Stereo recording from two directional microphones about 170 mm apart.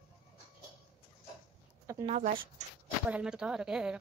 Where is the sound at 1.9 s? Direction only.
15° right (ahead or behind).